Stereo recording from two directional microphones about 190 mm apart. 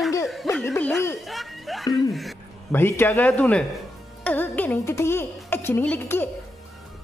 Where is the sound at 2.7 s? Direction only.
10° left (ahead or behind).